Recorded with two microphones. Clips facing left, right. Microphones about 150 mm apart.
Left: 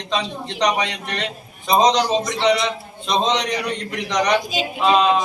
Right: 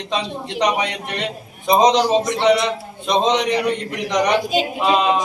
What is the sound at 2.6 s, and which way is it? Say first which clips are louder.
A man's voice: right 2 dB; 15° right (ahead or behind).